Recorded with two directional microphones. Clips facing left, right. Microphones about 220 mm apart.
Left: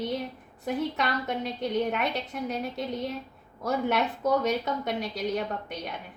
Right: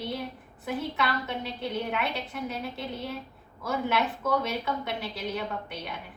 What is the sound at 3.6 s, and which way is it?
A woman's voice, 40° left (ahead or behind).